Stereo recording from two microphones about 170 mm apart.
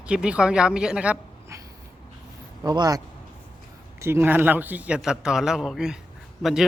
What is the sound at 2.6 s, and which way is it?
Speech, 25° right (ahead or behind).